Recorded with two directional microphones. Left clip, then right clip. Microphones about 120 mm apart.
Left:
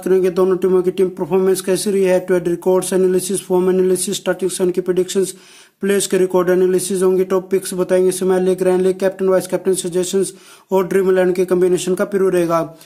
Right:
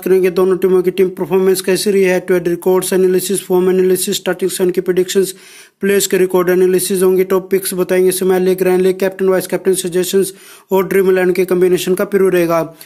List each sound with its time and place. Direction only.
0.0 s speech: 15° right (ahead or behind)